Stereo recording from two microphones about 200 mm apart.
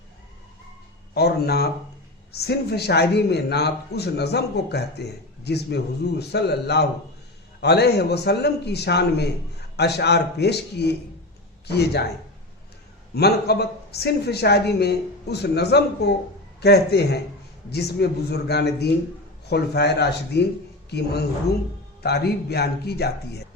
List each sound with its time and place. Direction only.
1.1 s a man's voice: 55° left (ahead or behind)
13.1 s a man's voice: 55° left (ahead or behind)
22.0 s a man's voice: 55° left (ahead or behind)